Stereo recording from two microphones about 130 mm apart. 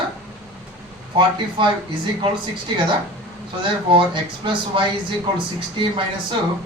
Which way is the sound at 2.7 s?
35° right (ahead or behind).